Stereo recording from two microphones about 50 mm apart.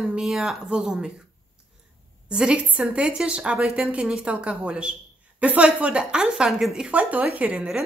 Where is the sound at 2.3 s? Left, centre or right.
Centre.